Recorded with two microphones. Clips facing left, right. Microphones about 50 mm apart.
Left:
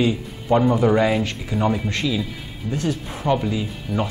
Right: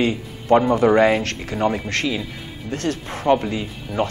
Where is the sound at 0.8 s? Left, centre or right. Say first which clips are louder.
Right 3 dB; right.